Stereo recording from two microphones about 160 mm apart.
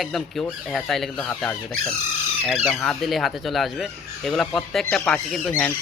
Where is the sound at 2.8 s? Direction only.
Centre (ahead or behind).